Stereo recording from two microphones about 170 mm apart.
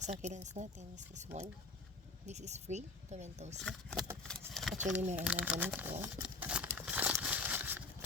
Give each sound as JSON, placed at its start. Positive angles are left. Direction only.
{"t": 0.0, "sound": "speech", "side_deg": -45}
{"t": 3.6, "sound": "speech", "side_deg": 5}
{"t": 4.2, "sound": "a sound", "side_deg": 5}
{"t": 5.1, "sound": "crumpling", "side_deg": -10}